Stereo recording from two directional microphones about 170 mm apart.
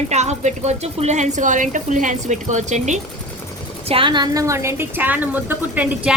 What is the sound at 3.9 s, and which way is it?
A woman's voice, 30° right (ahead or behind).